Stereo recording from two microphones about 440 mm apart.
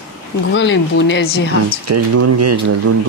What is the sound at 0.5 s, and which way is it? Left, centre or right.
Speech, left.